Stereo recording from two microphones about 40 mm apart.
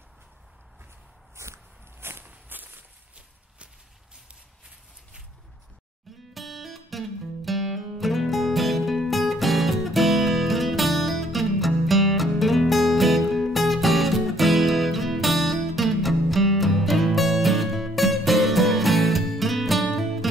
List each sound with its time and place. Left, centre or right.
2.0 s walk: right
2.2 s walk: right
6.3 s music: centre